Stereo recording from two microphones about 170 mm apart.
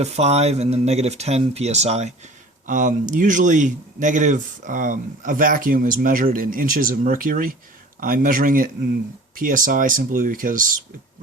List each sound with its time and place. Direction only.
0.0 s speech: 40° right (ahead or behind)